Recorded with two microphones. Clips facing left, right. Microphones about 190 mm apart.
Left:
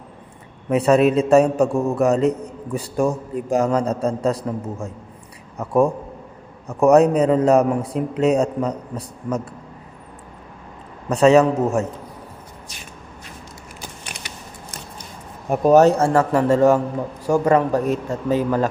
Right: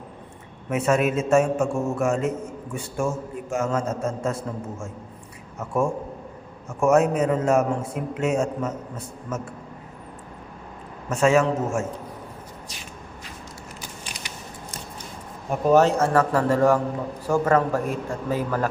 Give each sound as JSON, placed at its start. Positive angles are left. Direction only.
{"t": 0.7, "sound": "a man's voice", "side_deg": 35}
{"t": 11.3, "sound": "a man's voice", "side_deg": 35}
{"t": 15.4, "sound": "a man's voice", "side_deg": 40}